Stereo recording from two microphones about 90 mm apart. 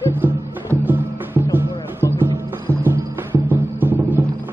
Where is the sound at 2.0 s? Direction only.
30° left (ahead or behind).